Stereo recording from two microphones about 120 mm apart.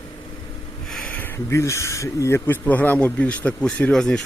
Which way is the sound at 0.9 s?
15° left (ahead or behind).